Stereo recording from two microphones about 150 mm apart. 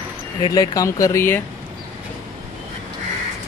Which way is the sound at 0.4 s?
25° left (ahead or behind).